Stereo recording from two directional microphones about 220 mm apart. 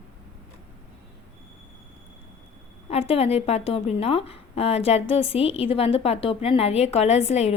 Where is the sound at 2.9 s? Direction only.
25° left (ahead or behind).